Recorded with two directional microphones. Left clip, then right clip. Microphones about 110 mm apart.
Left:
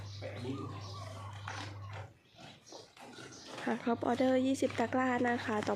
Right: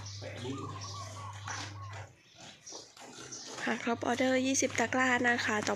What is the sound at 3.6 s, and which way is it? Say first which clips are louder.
Speech: right 1 dB; 15° left (ahead or behind).